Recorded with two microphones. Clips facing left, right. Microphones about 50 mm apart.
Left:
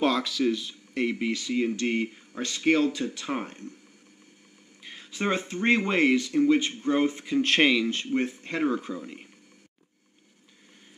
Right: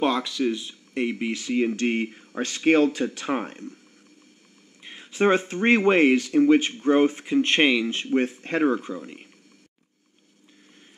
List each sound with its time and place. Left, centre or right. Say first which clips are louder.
0.0 s speech: right 1 dB; centre
1.3 s speech: right 3 dB; right
3.3 s speech: right 4 dB; right
4.8 s a sound: right 2 dB; centre
5.1 s speech: right 7 dB; right
7.3 s speech: right 1 dB; centre
7.9 s speech: right 4 dB; right
8.2 s speech: right 7 dB; right
8.8 s speech: right 2 dB; centre